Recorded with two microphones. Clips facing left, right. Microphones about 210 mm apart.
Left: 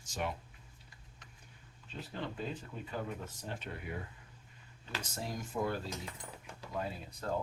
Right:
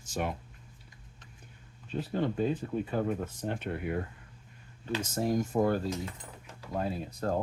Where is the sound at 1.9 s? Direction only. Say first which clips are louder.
Right 11 dB; 50° right (ahead or behind).